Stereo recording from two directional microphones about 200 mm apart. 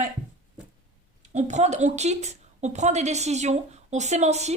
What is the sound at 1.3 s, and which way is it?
A woman's voice, 35° right (ahead or behind).